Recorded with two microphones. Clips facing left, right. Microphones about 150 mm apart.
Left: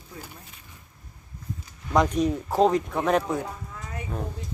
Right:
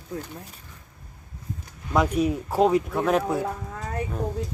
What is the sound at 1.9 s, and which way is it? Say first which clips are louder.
Speech: even; 5° right (ahead or behind).